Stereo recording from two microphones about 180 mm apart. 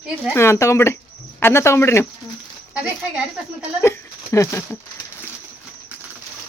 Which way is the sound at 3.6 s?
15° left (ahead or behind).